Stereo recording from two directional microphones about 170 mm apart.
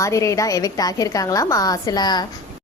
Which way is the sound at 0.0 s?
20° left (ahead or behind).